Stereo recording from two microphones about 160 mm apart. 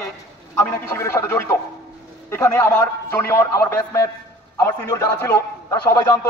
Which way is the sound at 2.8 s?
15° left (ahead or behind).